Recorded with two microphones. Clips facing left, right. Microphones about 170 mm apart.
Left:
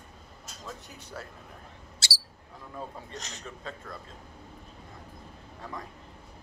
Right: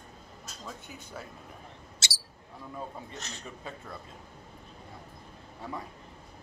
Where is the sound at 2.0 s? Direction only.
20° right (ahead or behind).